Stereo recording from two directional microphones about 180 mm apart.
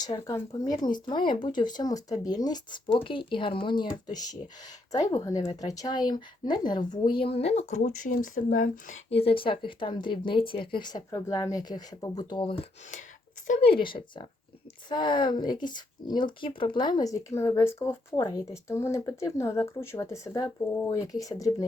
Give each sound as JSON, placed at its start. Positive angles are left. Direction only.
{"t": 0.0, "sound": "speech", "side_deg": 20}
{"t": 9.0, "sound": "speech", "side_deg": 30}